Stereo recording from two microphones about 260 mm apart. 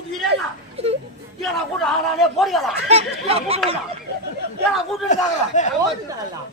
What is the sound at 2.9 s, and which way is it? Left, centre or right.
Snicker, right.